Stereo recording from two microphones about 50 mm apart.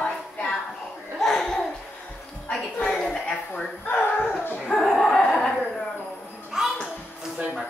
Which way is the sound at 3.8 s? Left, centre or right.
Left.